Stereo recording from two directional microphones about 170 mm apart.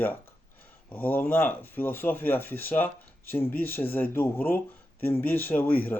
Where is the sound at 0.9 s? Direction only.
10° left (ahead or behind).